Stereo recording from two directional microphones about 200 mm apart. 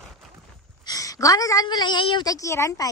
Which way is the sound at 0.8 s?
15° left (ahead or behind).